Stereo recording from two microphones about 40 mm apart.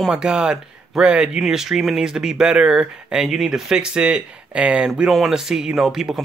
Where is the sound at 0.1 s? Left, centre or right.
Centre.